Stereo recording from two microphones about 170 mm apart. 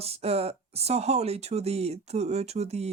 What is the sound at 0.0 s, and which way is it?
Speech, 35° right (ahead or behind).